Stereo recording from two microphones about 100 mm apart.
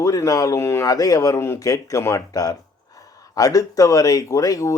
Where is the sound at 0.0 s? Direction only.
35° left (ahead or behind).